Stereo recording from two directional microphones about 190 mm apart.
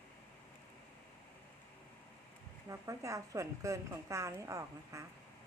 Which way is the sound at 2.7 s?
15° right (ahead or behind).